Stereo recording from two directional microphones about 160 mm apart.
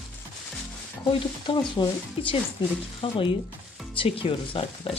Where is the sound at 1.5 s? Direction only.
30° left (ahead or behind).